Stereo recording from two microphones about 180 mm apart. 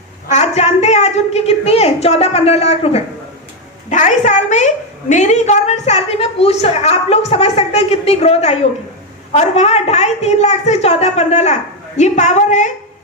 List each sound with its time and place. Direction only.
0.3 s a woman's voice: 40° left (ahead or behind)